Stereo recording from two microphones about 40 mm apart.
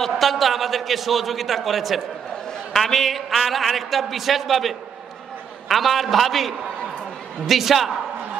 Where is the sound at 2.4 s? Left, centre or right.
Centre.